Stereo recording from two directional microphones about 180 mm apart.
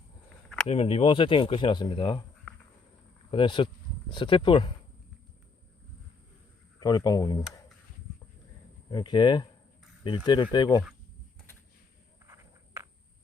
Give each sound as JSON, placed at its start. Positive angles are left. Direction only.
{"t": 0.7, "sound": "speech", "side_deg": 35}
{"t": 3.3, "sound": "speech", "side_deg": 25}
{"t": 6.7, "sound": "speech", "side_deg": 20}
{"t": 8.9, "sound": "speech", "side_deg": 25}
{"t": 12.2, "sound": "a sound", "side_deg": -15}